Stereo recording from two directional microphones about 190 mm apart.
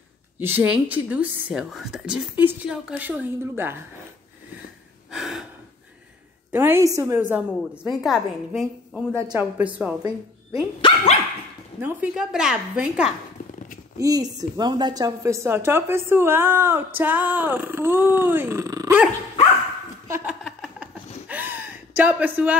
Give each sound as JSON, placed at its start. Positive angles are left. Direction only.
{"t": 0.4, "sound": "a woman's voice", "side_deg": -10}
{"t": 5.1, "sound": "gasp", "side_deg": 0}
{"t": 6.5, "sound": "a woman's voice", "side_deg": -10}
{"t": 10.8, "sound": "speech", "side_deg": 25}
{"t": 11.8, "sound": "a woman's voice", "side_deg": -5}
{"t": 13.9, "sound": "a woman's voice", "side_deg": -20}
{"t": 20.1, "sound": "a sound", "side_deg": -5}